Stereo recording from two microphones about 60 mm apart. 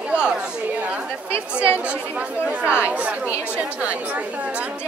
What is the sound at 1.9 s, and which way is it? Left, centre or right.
Speech, right.